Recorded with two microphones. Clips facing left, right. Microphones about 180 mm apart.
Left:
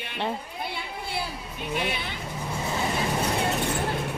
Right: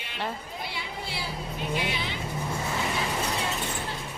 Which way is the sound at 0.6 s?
55° left (ahead or behind).